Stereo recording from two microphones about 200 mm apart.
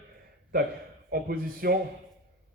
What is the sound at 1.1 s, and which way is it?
Speech, 50° right (ahead or behind).